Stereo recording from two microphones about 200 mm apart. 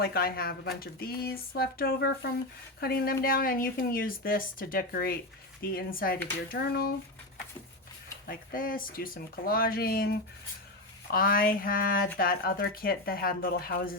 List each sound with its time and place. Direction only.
0.0 s speech: 50° left (ahead or behind)
8.3 s speech: 45° left (ahead or behind)